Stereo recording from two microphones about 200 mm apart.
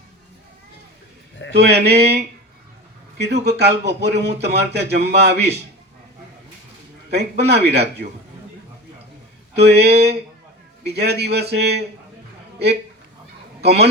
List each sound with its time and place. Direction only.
1.5 s speech: 55° right (ahead or behind)
7.1 s speech: 55° right (ahead or behind)
9.7 s speech: 55° right (ahead or behind)